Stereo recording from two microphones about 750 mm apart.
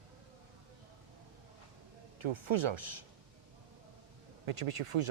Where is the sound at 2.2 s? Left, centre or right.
Right.